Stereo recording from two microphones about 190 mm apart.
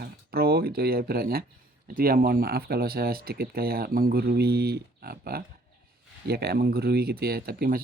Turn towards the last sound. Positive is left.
turn(degrees=-55)  # may be behind; listen again after turning